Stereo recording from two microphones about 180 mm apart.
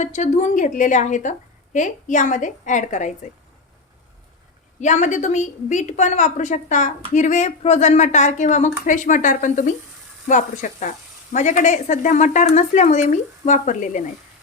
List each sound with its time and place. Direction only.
0.0 s speech: 40° left (ahead or behind)
4.8 s speech: 40° left (ahead or behind)